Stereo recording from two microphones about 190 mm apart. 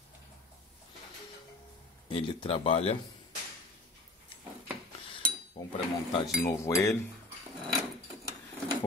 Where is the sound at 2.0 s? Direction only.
30° left (ahead or behind).